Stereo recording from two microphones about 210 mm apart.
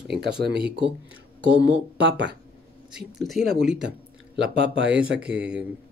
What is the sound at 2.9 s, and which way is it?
Speech, centre (ahead or behind).